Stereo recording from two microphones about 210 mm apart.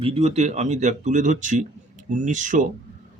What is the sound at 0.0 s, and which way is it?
Speech, 30° right (ahead or behind).